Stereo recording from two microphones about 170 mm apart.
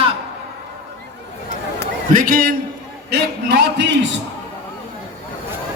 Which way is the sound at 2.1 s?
55° right (ahead or behind).